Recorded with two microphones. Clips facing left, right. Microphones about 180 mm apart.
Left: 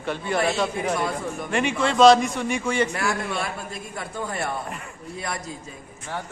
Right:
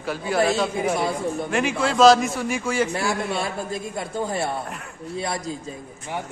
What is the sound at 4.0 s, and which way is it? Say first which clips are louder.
Speech: right 3 dB; 25° right (ahead or behind).